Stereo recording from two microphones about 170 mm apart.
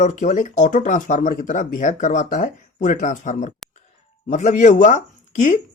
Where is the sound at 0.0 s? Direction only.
45° left (ahead or behind).